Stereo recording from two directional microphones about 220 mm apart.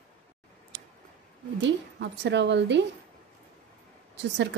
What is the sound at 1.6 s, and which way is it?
A woman's voice, 50° right (ahead or behind).